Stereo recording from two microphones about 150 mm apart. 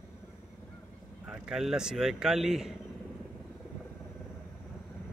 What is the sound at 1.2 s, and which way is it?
A man's voice, 5° right (ahead or behind).